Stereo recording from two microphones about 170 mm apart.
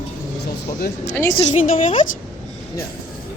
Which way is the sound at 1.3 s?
35° left (ahead or behind).